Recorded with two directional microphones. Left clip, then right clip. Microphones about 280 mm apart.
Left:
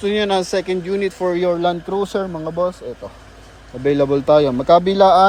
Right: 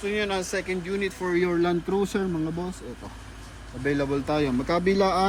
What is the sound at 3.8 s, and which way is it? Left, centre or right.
Speech, left.